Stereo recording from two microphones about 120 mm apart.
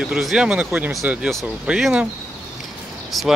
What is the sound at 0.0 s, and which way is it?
Speech, 5° right (ahead or behind).